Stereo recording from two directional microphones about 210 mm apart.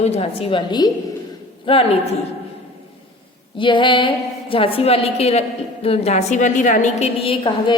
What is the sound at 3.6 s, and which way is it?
A woman's voice, 25° left (ahead or behind).